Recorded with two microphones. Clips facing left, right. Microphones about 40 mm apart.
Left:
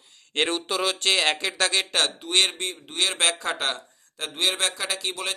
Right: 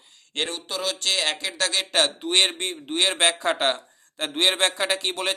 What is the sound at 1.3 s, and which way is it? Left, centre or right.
Speech, centre.